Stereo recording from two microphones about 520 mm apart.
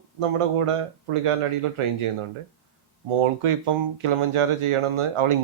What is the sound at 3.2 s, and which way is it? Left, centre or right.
Speech, right.